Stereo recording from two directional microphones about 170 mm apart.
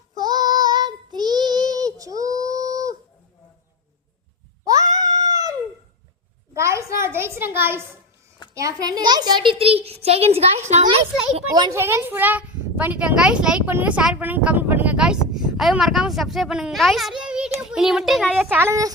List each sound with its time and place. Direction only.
0.1 s child singing: 25° right (ahead or behind)
4.6 s cat: 20° right (ahead or behind)
5.1 s dog: 20° right (ahead or behind)
6.5 s a sound: 15° right (ahead or behind)
8.5 s a child's voice: 20° right (ahead or behind); by 10.4 s 35° right (ahead or behind)
11.3 s a child's voice: 25° right (ahead or behind)
11.8 s a child's voice: 15° right (ahead or behind)
18.4 s a woman's voice: 15° right (ahead or behind)